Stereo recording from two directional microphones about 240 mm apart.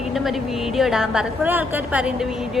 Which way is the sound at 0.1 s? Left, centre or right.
Centre.